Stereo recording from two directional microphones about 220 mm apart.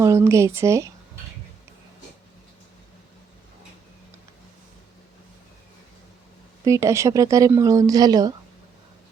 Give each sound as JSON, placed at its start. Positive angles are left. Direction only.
{"t": 0.0, "sound": "a woman's voice", "side_deg": -15}
{"t": 6.7, "sound": "a woman's voice", "side_deg": -15}